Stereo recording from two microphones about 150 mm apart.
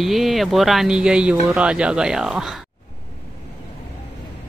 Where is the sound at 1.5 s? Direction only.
5° right (ahead or behind).